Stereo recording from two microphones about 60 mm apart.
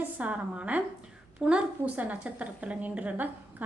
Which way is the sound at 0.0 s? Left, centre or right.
Right.